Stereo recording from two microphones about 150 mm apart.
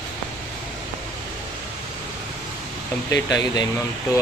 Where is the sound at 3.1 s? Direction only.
25° left (ahead or behind).